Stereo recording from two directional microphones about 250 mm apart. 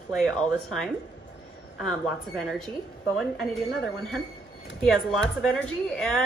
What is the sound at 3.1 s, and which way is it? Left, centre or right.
Speech, centre.